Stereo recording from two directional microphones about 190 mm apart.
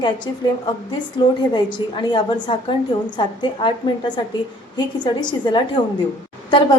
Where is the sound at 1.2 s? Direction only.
25° left (ahead or behind).